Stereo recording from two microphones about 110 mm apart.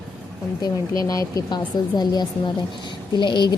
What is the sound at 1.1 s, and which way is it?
Speech, 30° left (ahead or behind).